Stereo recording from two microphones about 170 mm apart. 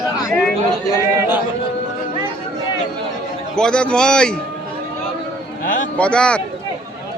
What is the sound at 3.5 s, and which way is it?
Speech, 5° left (ahead or behind).